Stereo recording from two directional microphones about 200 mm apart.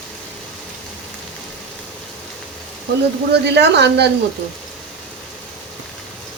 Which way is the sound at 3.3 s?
55° right (ahead or behind).